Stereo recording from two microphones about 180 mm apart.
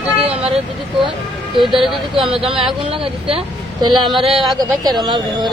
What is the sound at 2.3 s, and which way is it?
Speech, 30° right (ahead or behind).